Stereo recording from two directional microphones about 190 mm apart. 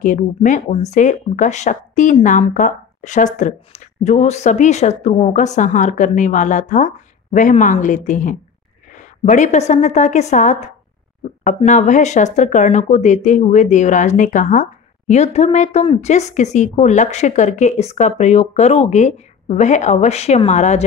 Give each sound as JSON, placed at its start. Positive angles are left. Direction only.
{"t": 0.0, "sound": "speech", "side_deg": 40}